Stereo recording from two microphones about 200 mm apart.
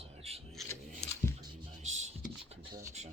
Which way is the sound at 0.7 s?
15° left (ahead or behind).